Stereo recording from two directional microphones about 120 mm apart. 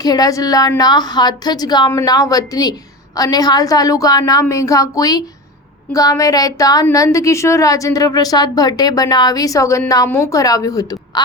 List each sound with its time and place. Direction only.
0.0 s a woman's voice: 30° left (ahead or behind)